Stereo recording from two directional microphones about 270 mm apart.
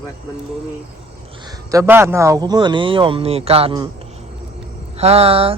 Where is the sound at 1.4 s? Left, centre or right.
Centre.